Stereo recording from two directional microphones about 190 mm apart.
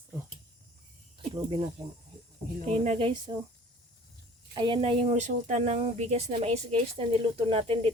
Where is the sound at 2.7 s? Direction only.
30° right (ahead or behind).